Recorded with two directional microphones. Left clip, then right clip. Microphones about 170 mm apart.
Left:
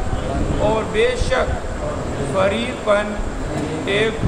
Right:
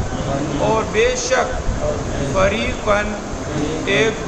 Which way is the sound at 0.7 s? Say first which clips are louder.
Right 2 dB; 15° right (ahead or behind).